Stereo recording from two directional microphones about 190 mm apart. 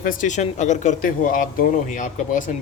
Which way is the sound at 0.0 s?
45° left (ahead or behind).